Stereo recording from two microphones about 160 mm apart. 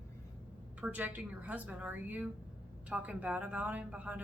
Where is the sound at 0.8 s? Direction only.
10° right (ahead or behind).